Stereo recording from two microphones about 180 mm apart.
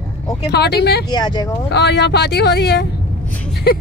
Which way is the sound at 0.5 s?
65° left (ahead or behind).